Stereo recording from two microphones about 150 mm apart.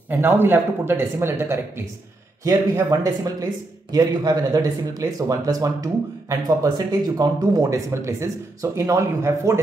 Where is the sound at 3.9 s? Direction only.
25° right (ahead or behind).